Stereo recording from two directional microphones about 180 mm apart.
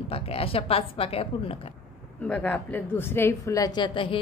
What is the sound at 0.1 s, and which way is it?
Speech, 30° left (ahead or behind).